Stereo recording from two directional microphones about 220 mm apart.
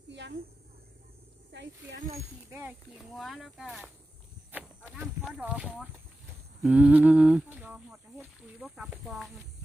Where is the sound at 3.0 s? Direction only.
Centre (ahead or behind).